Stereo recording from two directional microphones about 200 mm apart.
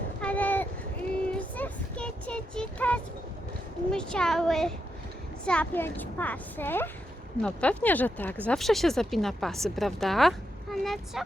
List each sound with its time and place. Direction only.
0.2 s a sound: 5° left (ahead or behind)
1.3 s child singing: 10° left (ahead or behind)
3.9 s a woman's voice: 5° left (ahead or behind)